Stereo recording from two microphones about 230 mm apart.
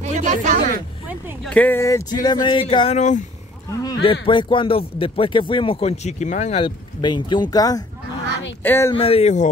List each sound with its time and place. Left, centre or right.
0.0 s speech: right
1.0 s speech: centre
1.5 s speech: centre; by 3.3 s left
3.8 s speech: centre
8.9 s speech: left